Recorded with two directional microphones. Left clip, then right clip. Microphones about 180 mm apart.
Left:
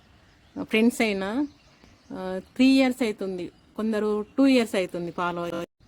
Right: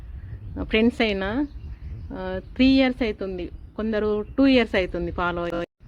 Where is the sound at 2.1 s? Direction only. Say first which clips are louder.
Right 2 dB; 15° left (ahead or behind).